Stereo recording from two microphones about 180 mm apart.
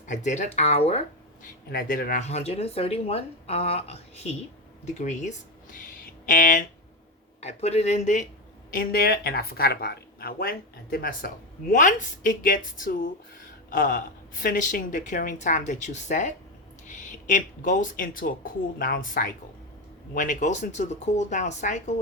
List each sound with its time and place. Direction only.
0.0 s speech: 40° left (ahead or behind)
1.7 s speech: 50° left (ahead or behind)
7.4 s speech: 35° left (ahead or behind)
8.7 s speech: 55° left (ahead or behind)